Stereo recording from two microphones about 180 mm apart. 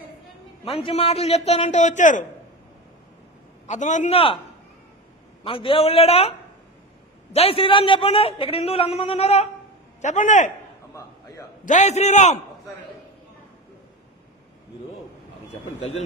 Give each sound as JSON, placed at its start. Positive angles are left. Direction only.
{"t": 0.7, "sound": "a man's voice", "side_deg": 30}
{"t": 3.6, "sound": "a man's voice", "side_deg": 40}
{"t": 5.4, "sound": "a man's voice", "side_deg": 30}
{"t": 7.3, "sound": "a man's voice", "side_deg": 30}
{"t": 11.6, "sound": "a man's voice", "side_deg": 40}